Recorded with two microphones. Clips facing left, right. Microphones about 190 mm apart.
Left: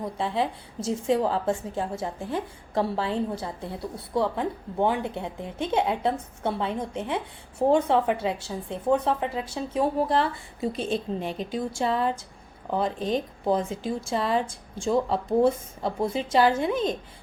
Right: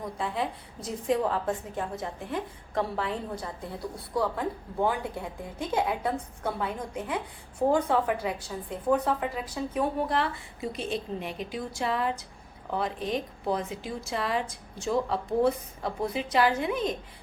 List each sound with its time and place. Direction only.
0.0 s a woman's voice: 30° left (ahead or behind)